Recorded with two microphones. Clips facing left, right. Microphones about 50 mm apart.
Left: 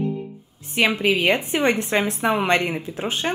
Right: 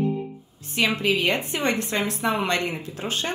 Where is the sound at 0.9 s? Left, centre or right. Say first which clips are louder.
Left 2 dB; centre.